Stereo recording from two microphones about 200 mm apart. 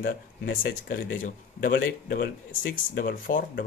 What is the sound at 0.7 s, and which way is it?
Speech, 50° left (ahead or behind).